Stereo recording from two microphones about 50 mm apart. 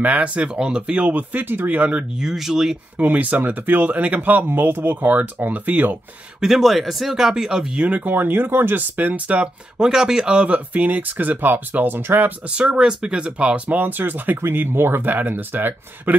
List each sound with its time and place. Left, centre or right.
0.0 s speech: right
0.5 s speech: centre
1.0 s speech: right
1.7 s speech: right
2.1 s speech: centre
3.0 s speech: right
6.4 s speech: centre
7.8 s speech: right
8.1 s speech: right
8.9 s speech: right
9.8 s speech: centre; by 12.4 s right
12.4 s speech: right
13.7 s speech: right